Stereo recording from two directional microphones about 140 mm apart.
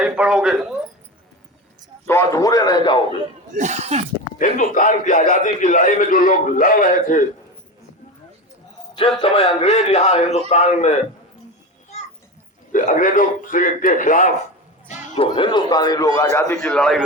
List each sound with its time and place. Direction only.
0.0 s speech: 5° right (ahead or behind)
2.0 s a man's voice: 20° left (ahead or behind)
3.5 s speech: 60° right (ahead or behind)
4.4 s a man's voice: 70° left (ahead or behind)
9.2 s a man's voice: 45° left (ahead or behind)
12.7 s a man's voice: 70° left (ahead or behind)
14.8 s a sound: 50° left (ahead or behind)
15.3 s a man's voice: 35° left (ahead or behind)
16.6 s a man's voice: 5° left (ahead or behind)